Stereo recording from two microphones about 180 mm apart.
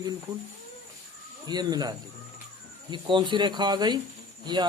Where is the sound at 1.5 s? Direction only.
20° right (ahead or behind).